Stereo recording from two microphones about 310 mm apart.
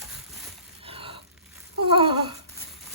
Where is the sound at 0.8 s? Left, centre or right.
Centre.